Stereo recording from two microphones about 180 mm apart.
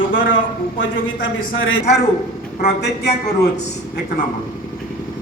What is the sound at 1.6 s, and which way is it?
Speech, 90° left.